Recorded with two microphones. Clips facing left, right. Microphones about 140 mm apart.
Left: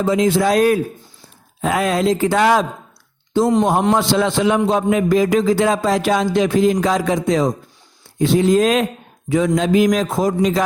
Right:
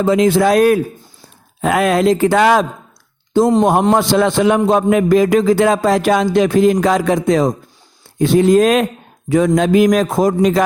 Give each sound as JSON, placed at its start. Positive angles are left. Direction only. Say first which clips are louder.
{"t": 0.0, "sound": "a man's voice", "louder": "right 3 dB", "side_deg": -65}
{"t": 3.3, "sound": "a man's voice", "louder": "right 3 dB", "side_deg": -45}